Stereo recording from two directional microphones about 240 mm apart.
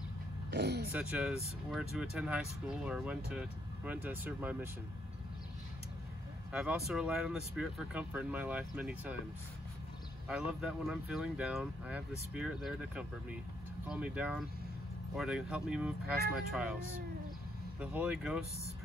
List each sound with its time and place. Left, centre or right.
0.5 s vehicle: right
0.9 s speech: centre
6.5 s speech: centre
10.6 s speech: centre
17.7 s speech: centre